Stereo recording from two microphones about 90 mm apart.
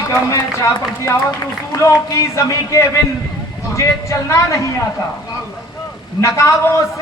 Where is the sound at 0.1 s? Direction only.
35° left (ahead or behind).